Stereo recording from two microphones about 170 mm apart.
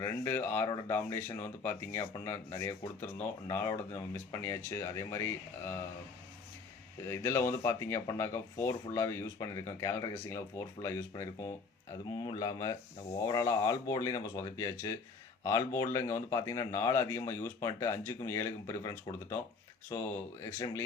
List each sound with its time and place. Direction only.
0.0 s speech: 15° left (ahead or behind)
7.1 s speech: 15° left (ahead or behind)